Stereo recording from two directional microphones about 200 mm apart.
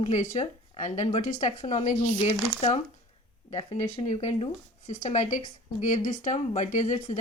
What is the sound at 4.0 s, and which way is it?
Speech, 30° left (ahead or behind).